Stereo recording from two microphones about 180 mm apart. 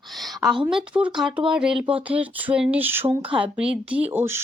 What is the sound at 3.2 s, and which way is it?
Speech, 30° right (ahead or behind).